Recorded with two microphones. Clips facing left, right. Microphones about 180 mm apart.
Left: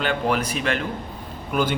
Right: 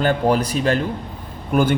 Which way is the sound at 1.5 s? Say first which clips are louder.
Right 5 dB; 50° right (ahead or behind).